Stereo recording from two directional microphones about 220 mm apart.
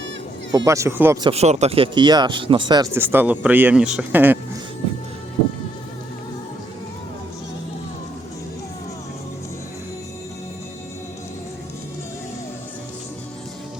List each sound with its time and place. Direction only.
0.5 s speech: 15° right (ahead or behind)
1.3 s speech: 30° right (ahead or behind); by 4.4 s 10° right (ahead or behind)